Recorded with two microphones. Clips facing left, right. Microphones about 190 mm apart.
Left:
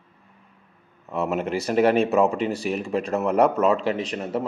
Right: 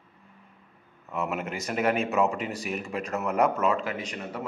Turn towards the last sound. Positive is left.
turn(degrees=35)  # may be behind; listen again after turning